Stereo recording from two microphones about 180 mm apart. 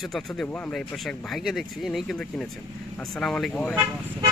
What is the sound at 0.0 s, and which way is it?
Speech, centre (ahead or behind).